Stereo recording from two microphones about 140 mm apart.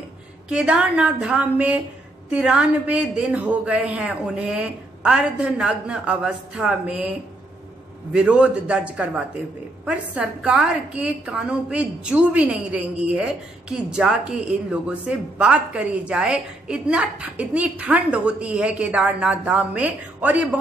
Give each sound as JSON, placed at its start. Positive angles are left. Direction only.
{"t": 0.5, "sound": "a woman's voice", "side_deg": -5}
{"t": 8.1, "sound": "a woman's voice", "side_deg": -10}